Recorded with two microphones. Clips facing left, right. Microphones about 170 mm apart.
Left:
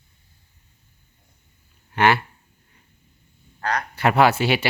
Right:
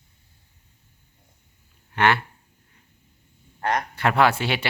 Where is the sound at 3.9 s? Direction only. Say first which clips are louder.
Left 4 dB; 5° left (ahead or behind).